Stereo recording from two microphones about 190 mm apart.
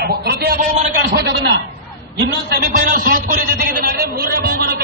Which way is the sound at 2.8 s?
45° right (ahead or behind).